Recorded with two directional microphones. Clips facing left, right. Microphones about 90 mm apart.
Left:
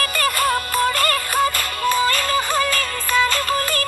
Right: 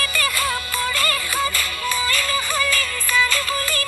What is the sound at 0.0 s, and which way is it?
Music, 45° left (ahead or behind).